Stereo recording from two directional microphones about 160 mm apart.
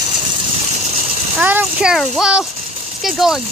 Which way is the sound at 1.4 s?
10° right (ahead or behind).